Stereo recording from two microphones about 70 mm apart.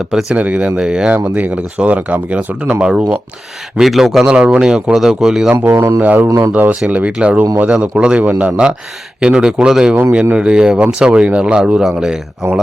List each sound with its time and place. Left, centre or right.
0.0 s speech: centre
0.3 s speech: centre
1.1 s speech: right; by 5.5 s centre
6.0 s speech: right
6.2 s speech: right
6.5 s speech: right